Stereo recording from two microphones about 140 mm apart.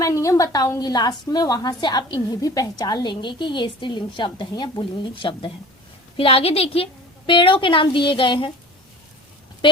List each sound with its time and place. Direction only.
0.0 s a woman's voice: 25° left (ahead or behind)